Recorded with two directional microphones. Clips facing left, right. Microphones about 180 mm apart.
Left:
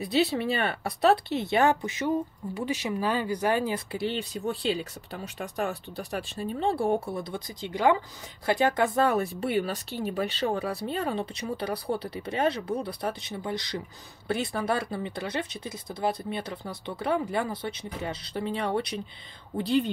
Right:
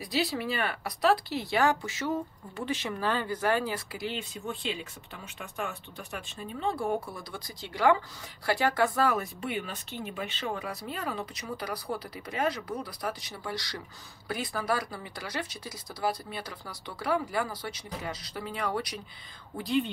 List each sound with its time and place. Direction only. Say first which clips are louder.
0.0 s speech: left 5 dB; 25° left (ahead or behind)